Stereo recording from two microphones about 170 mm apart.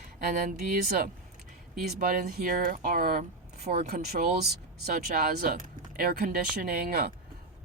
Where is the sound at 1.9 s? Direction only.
55° right (ahead or behind).